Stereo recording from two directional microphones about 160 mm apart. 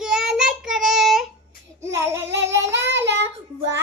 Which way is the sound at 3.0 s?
90° right.